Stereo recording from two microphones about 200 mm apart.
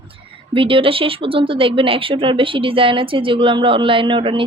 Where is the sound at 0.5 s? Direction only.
25° right (ahead or behind).